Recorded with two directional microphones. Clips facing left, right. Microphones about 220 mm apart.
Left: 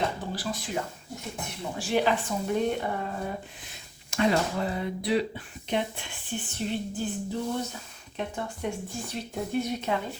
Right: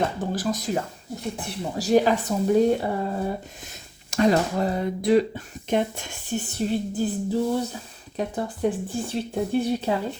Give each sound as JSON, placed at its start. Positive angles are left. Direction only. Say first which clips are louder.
{"t": 0.2, "sound": "speech", "louder": "right 7 dB", "side_deg": -45}